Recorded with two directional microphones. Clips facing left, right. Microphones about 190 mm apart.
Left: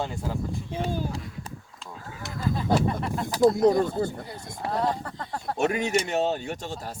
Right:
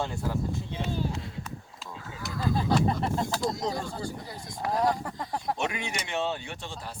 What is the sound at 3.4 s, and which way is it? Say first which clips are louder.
Speech: left 11 dB; 55° left (ahead or behind).